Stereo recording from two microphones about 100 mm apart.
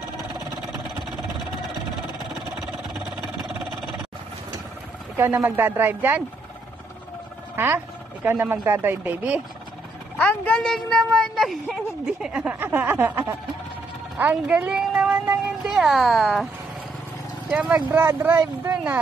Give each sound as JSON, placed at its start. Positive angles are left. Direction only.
{"t": 5.1, "sound": "speech", "side_deg": -20}
{"t": 7.5, "sound": "speech", "side_deg": -20}
{"t": 10.1, "sound": "a woman's voice", "side_deg": 15}
{"t": 12.3, "sound": "a woman's voice", "side_deg": -10}
{"t": 17.5, "sound": "speech", "side_deg": -10}